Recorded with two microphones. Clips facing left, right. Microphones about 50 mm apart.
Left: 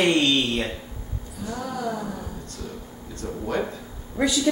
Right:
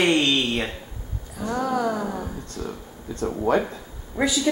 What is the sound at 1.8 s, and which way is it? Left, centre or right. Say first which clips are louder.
Speech: right 4 dB; right.